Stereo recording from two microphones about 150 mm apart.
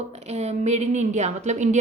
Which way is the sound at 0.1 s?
45° right (ahead or behind).